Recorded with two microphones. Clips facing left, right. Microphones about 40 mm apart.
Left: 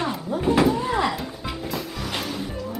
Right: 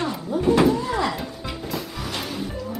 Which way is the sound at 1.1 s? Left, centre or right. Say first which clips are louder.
Even; centre.